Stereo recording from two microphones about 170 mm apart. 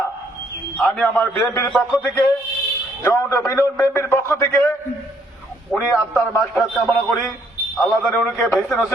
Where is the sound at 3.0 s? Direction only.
15° left (ahead or behind).